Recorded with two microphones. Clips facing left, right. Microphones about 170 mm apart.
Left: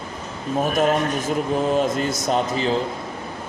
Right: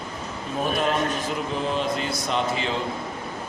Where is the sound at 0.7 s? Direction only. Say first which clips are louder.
Left 4 dB; 45° left (ahead or behind).